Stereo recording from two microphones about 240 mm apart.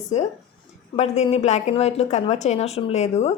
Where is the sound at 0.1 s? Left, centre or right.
Left.